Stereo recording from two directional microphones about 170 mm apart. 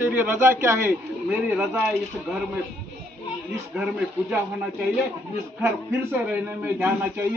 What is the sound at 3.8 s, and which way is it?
Speech, 5° right (ahead or behind).